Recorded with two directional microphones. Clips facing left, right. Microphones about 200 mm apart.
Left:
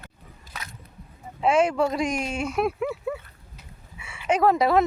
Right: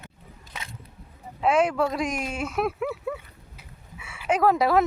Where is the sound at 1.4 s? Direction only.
Centre (ahead or behind).